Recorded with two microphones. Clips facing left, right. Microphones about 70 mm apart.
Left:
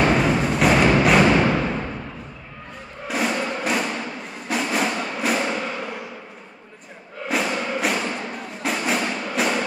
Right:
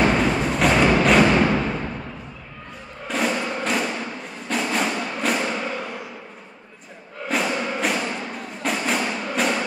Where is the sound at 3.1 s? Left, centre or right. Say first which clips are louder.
Even; centre.